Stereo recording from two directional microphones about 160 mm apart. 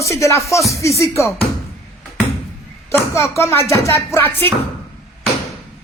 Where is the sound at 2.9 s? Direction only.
15° left (ahead or behind).